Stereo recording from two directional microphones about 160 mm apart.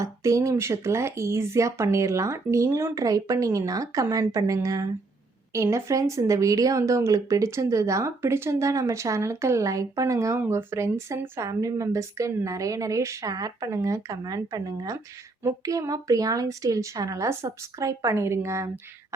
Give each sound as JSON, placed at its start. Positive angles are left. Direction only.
{"t": 0.0, "sound": "speech", "side_deg": -20}